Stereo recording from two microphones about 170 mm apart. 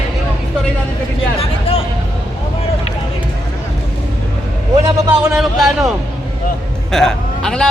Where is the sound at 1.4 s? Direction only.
35° left (ahead or behind).